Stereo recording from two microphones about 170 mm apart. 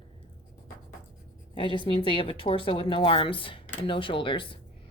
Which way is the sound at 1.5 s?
30° left (ahead or behind).